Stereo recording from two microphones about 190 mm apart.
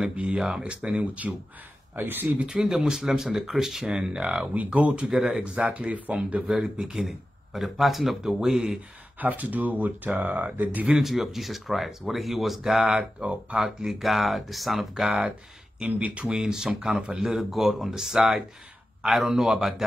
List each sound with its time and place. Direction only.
0.0 s speech: 5° right (ahead or behind)